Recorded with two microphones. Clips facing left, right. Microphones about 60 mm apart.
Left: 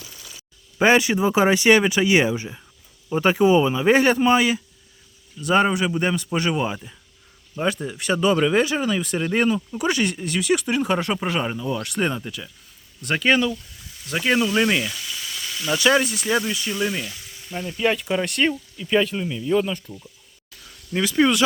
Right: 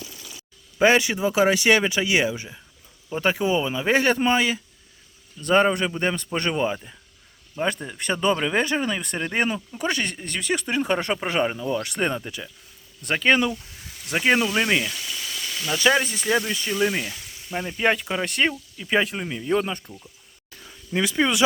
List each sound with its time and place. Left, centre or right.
0.8 s speech: left; by 8.4 s centre
8.4 s speech: centre
9.7 s speech: centre
13.5 s speech: right
14.1 s speech: right
14.4 s speech: centre
17.9 s speech: centre
20.6 s a sound: centre